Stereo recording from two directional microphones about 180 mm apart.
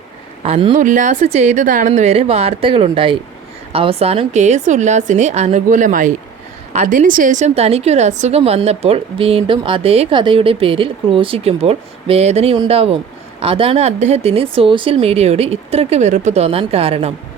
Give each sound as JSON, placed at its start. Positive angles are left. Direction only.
{"t": 0.4, "sound": "a woman's voice", "side_deg": -35}
{"t": 1.9, "sound": "a woman's voice", "side_deg": -35}